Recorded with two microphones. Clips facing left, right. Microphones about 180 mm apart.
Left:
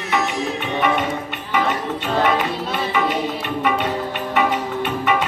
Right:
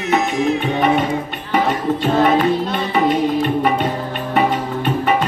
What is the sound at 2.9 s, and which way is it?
Music, 40° right (ahead or behind).